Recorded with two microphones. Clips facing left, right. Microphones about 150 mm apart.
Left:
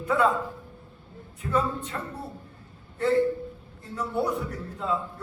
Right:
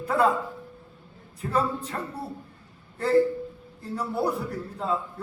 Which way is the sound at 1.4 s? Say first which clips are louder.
Even; 35° right (ahead or behind).